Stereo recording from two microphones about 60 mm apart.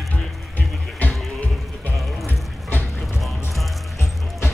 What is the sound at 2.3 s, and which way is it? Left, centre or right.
Music, left.